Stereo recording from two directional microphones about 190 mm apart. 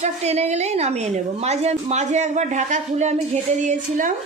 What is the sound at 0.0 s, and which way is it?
A woman's voice, 35° right (ahead or behind).